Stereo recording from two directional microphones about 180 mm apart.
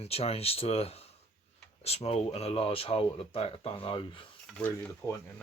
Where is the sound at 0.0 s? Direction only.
35° left (ahead or behind).